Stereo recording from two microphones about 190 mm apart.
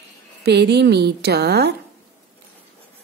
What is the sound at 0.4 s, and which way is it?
A woman's voice, 60° right (ahead or behind).